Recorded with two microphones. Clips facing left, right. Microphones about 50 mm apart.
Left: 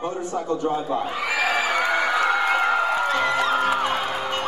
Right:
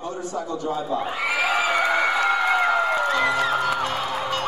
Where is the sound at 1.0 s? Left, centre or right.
Right.